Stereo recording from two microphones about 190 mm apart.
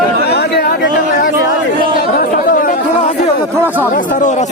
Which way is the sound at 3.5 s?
10° right (ahead or behind).